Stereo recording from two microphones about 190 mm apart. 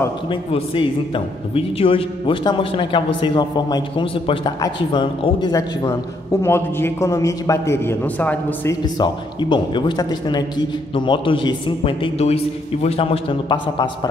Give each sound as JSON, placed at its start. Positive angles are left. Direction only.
{"t": 0.3, "sound": "a man's voice", "side_deg": 30}
{"t": 8.8, "sound": "a man's voice", "side_deg": 20}